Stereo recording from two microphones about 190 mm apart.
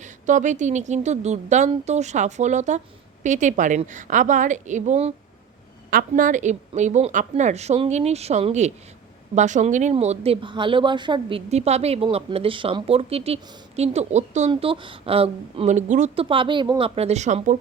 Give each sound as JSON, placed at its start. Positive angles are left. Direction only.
{"t": 0.0, "sound": "speech", "side_deg": -40}
{"t": 14.5, "sound": "speech", "side_deg": -25}